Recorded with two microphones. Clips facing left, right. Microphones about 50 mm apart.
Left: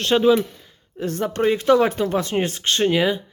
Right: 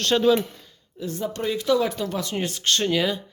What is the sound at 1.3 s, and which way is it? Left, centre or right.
A woman's voice, left.